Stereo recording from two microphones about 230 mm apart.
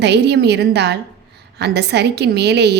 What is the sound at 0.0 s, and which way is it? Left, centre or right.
A woman's voice, right.